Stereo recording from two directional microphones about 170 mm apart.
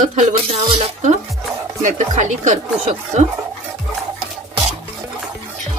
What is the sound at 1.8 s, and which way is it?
Speech, 45° right (ahead or behind).